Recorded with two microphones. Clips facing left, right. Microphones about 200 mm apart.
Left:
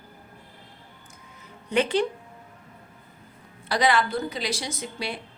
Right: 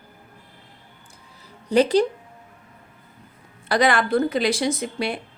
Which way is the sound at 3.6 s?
50° right (ahead or behind).